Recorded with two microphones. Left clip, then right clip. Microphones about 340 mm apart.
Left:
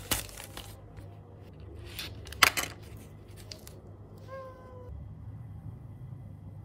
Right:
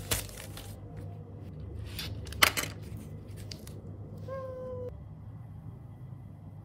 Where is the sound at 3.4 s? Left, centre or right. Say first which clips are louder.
Left 1 dB; centre.